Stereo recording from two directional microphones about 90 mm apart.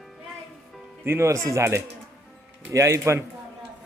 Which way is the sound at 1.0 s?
30° right (ahead or behind).